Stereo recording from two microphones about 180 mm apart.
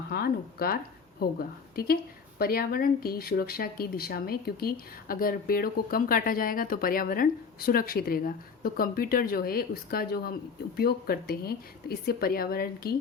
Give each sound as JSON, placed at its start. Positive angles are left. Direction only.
{"t": 0.1, "sound": "speech", "side_deg": 55}